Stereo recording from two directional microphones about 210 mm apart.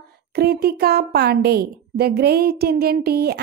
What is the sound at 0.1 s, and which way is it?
A woman's voice, 50° right (ahead or behind).